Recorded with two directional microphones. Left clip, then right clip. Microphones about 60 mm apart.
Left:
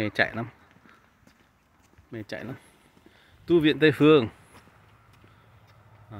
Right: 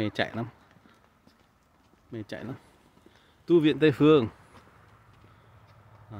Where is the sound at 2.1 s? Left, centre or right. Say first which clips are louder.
Left 2 dB; right.